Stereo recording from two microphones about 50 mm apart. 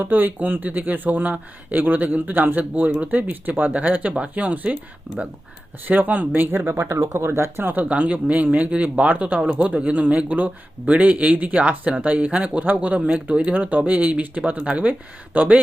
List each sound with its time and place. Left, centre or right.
0.0 s a man's voice: right
6.5 s speech: right
6.7 s speech: right
7.7 s a man's voice: right